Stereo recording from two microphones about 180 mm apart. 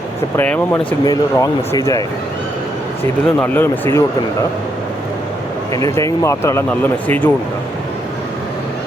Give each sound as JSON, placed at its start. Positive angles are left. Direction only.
{"t": 0.3, "sound": "speech", "side_deg": 10}
{"t": 1.0, "sound": "speech", "side_deg": 20}
{"t": 5.7, "sound": "speech", "side_deg": 20}